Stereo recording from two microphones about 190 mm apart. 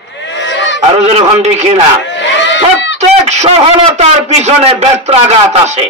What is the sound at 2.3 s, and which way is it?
Goat, 70° left (ahead or behind).